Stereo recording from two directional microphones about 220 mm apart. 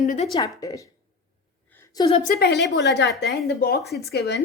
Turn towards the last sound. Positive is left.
turn(degrees=50)  # may be behind; listen again after turning